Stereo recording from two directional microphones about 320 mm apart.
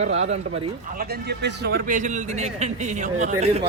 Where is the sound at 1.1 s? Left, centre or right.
Right.